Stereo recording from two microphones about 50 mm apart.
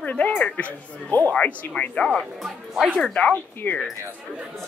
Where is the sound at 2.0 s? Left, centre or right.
Centre.